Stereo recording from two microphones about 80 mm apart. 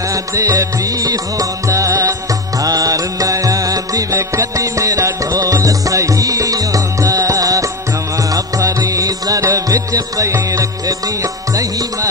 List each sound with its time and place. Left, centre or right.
0.1 s music: right